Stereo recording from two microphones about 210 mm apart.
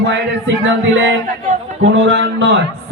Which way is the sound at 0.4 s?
60° right (ahead or behind).